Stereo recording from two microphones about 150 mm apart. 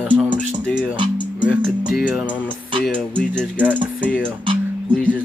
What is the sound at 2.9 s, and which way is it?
Speech, 5° left (ahead or behind).